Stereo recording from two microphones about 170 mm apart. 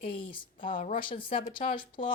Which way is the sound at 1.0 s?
30° left (ahead or behind).